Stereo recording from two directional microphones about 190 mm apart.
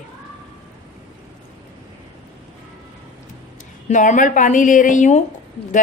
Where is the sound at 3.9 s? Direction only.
40° left (ahead or behind).